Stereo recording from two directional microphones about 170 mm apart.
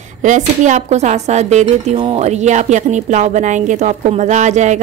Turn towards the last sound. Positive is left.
turn(degrees=-45)  # may be behind; listen again after turning